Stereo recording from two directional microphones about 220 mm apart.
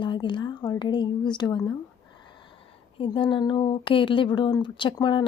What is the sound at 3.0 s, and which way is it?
Speech, 20° left (ahead or behind).